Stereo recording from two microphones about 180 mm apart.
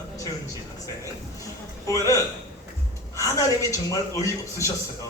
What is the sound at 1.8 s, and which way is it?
A man's voice, 15° left (ahead or behind).